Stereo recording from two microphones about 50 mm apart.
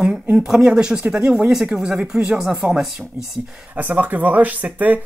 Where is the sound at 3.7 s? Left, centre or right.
Right.